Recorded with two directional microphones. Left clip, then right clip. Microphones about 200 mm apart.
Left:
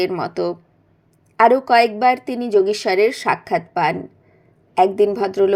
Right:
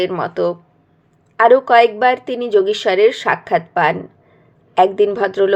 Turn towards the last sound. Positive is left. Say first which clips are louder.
# right 2 dB
turn(degrees=25)  # may be behind; listen again after turning